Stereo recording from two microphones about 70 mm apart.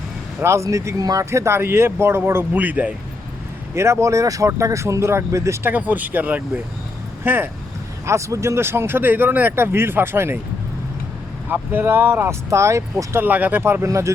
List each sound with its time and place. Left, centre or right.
0.4 s speech: right
1.2 s speech: right
2.6 s speech: right
3.8 s speech: right
5.6 s speech: right
8.0 s speech: right
11.4 s speech: right
12.5 s speech: right
13.2 s speech: right
13.8 s speech: right